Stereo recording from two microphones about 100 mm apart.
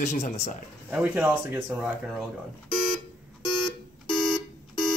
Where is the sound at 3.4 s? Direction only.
50° left (ahead or behind).